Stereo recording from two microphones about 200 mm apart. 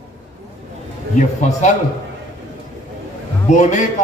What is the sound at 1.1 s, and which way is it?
Speech, 40° left (ahead or behind).